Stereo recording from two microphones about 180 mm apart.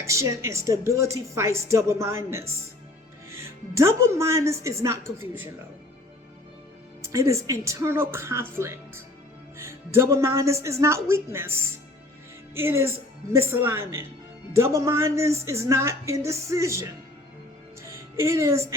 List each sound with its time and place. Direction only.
0.0 s a woman's voice: 15° right (ahead or behind)
7.0 s a woman's voice: 15° right (ahead or behind)